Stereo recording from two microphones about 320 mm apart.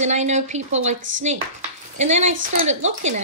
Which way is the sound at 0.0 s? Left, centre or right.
Right.